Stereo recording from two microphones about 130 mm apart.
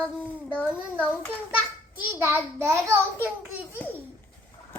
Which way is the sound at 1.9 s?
15° right (ahead or behind).